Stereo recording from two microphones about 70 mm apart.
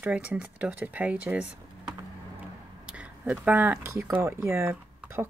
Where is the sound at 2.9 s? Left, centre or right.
Centre.